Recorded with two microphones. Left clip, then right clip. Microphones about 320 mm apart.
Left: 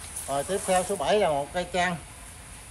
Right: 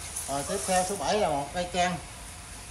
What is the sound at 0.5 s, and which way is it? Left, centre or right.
Speech, centre.